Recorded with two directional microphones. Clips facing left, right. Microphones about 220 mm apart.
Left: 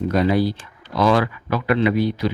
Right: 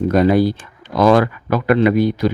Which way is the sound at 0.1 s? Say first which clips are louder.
Right 5 dB; 50° right (ahead or behind).